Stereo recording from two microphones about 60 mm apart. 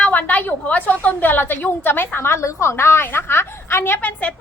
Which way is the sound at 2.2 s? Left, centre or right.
Left.